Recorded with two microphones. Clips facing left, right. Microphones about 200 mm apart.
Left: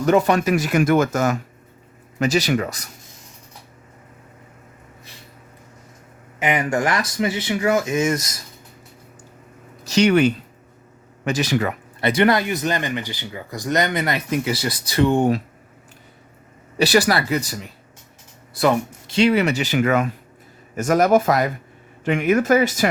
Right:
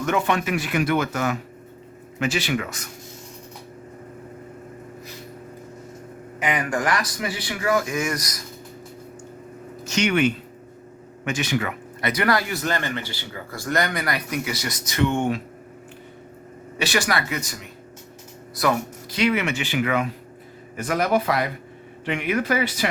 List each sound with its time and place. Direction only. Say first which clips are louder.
0.0 s speech: left 6 dB; 35° left (ahead or behind)
6.4 s speech: left 4 dB; 25° left (ahead or behind)
9.8 s speech: left 5 dB; 35° left (ahead or behind)
16.7 s speech: left 6 dB; 35° left (ahead or behind)